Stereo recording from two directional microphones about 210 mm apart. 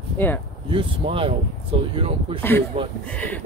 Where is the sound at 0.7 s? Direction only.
25° right (ahead or behind).